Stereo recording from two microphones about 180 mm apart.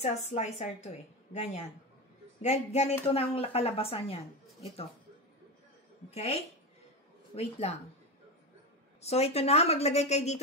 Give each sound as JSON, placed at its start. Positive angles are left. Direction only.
{"t": 0.0, "sound": "a woman's voice", "side_deg": 40}
{"t": 6.1, "sound": "a woman's voice", "side_deg": 35}
{"t": 9.0, "sound": "a woman's voice", "side_deg": 35}